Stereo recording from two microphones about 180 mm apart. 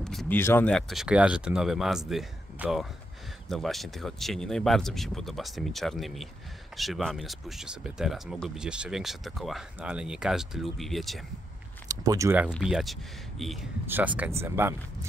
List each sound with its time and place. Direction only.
0.0 s a sound: centre (ahead or behind)
0.4 s speech: 10° left (ahead or behind)
11.9 s speech: 20° right (ahead or behind)
12.6 s speech: centre (ahead or behind)
13.8 s speech: 10° right (ahead or behind)